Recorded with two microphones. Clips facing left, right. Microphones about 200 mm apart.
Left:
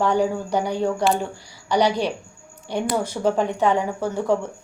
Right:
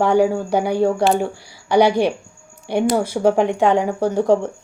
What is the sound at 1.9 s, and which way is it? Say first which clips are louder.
Speech: right 5 dB; 55° right (ahead or behind).